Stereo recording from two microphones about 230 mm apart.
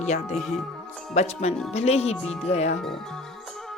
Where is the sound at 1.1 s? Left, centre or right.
Left.